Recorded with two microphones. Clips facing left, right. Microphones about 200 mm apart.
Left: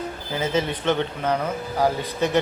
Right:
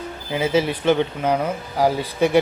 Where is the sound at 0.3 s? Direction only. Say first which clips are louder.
Right 4 dB; 10° right (ahead or behind).